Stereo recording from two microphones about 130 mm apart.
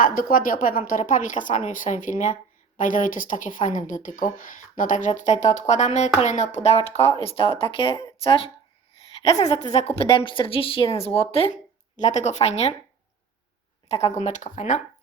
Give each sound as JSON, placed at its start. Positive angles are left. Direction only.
{"t": 0.0, "sound": "a woman's voice", "side_deg": 90}
{"t": 9.4, "sound": "a woman's voice", "side_deg": 55}
{"t": 11.5, "sound": "speech", "side_deg": 65}
{"t": 13.8, "sound": "speech", "side_deg": 55}
{"t": 14.2, "sound": "speech", "side_deg": 65}